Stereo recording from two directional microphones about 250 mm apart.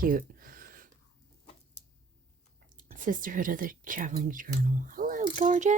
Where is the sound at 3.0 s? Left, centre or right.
Right.